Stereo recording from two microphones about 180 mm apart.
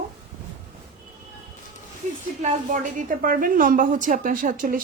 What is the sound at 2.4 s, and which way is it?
A woman's voice, 45° right (ahead or behind).